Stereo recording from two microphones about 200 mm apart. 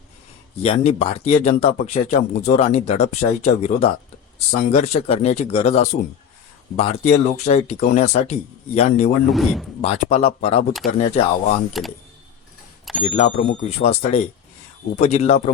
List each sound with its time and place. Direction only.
0.6 s speech: 30° left (ahead or behind)
9.3 s speech: centre (ahead or behind)
9.8 s speech: 30° left (ahead or behind)
10.7 s speech: centre (ahead or behind)
11.1 s speech: 35° left (ahead or behind)
13.0 s speech: 30° left (ahead or behind)